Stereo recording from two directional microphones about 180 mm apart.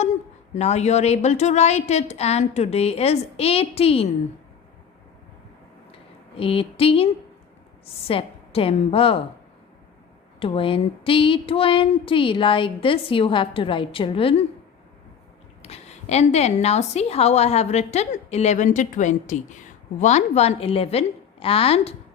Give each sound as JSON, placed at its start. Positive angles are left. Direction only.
{"t": 0.0, "sound": "a woman's voice", "side_deg": 40}
{"t": 6.3, "sound": "a woman's voice", "side_deg": 30}
{"t": 10.4, "sound": "a sound", "side_deg": 30}
{"t": 15.6, "sound": "a woman's voice", "side_deg": 35}